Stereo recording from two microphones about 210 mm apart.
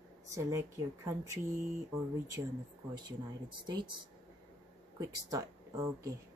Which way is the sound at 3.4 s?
20° right (ahead or behind).